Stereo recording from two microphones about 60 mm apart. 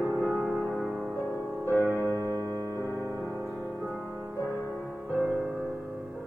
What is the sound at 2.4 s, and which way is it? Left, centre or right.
Music, right.